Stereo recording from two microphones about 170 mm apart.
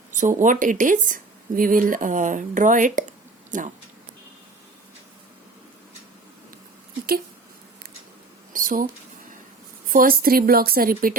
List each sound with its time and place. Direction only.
0.1 s speech: 50° right (ahead or behind)
8.5 s a sound: 55° right (ahead or behind)
9.9 s speech: 55° right (ahead or behind)